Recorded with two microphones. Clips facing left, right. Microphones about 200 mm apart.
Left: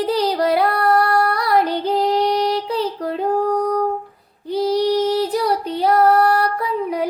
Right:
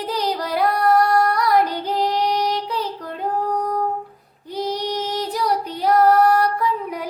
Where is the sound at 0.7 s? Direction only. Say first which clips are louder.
Even; 65° left (ahead or behind).